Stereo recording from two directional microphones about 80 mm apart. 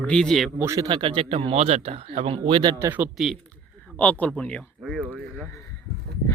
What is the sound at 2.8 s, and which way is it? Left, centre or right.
Speech, right.